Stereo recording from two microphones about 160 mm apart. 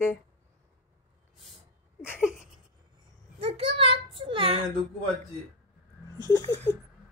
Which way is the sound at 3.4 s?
35° right (ahead or behind).